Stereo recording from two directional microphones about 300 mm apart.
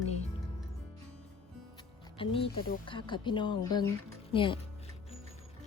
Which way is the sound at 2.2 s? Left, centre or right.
Centre.